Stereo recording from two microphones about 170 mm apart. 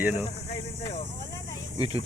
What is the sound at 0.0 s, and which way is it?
Speech, 10° right (ahead or behind).